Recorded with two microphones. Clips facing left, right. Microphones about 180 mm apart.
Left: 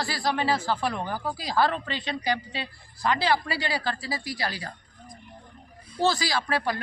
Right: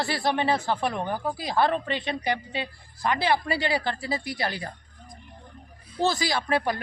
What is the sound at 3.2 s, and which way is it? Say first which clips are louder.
Speech: right 1 dB; 20° right (ahead or behind).